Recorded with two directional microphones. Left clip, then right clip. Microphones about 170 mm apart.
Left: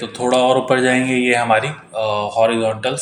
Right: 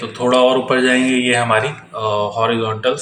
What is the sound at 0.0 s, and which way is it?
Speech, 40° left (ahead or behind).